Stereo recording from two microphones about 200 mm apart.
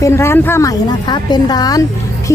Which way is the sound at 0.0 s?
15° left (ahead or behind).